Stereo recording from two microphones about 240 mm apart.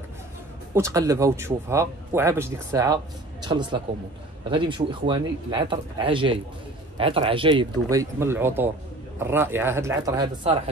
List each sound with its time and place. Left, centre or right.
0.7 s speech: centre